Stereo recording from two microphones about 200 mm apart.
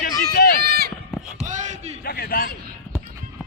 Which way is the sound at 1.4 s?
35° right (ahead or behind).